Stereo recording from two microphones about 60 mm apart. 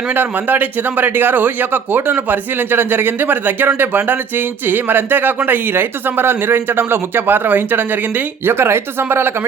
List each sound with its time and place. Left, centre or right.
0.1 s speech: right